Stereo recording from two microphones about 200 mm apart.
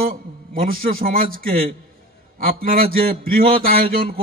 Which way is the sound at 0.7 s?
45° right (ahead or behind).